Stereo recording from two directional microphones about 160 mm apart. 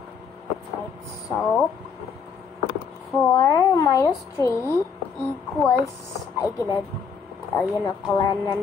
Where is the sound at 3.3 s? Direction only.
20° left (ahead or behind).